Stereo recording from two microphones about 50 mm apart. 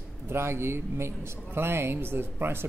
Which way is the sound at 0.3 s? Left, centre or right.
Right.